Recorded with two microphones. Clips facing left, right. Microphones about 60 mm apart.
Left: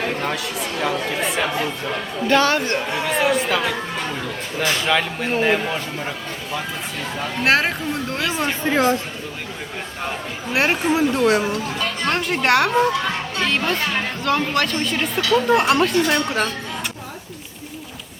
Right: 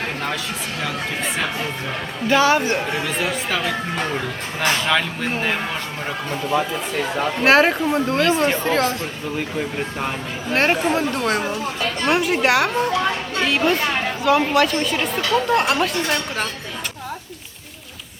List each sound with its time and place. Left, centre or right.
2.3 s speech: centre
4.9 s speech: centre
7.4 s speech: centre
8.6 s speech: centre
10.5 s speech: centre